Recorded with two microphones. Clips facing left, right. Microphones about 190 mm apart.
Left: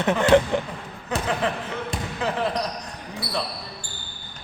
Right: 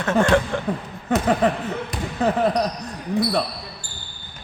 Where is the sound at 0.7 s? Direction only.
55° right (ahead or behind).